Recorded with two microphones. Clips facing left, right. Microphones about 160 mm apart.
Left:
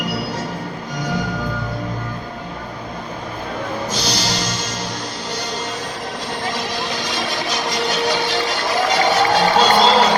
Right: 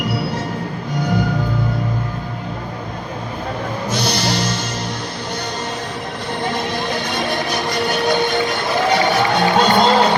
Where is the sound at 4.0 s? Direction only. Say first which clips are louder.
Right 5 dB; 55° right (ahead or behind).